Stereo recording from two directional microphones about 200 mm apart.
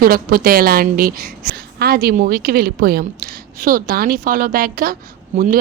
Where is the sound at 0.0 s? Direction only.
45° right (ahead or behind).